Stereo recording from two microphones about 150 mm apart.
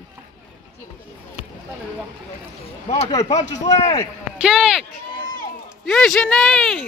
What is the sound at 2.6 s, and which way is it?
Speech, 40° left (ahead or behind).